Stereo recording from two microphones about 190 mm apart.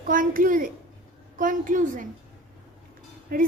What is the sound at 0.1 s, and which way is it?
A child's voice, 45° right (ahead or behind).